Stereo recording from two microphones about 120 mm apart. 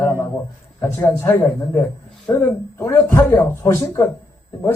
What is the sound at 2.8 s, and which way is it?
Speech, 25° left (ahead or behind).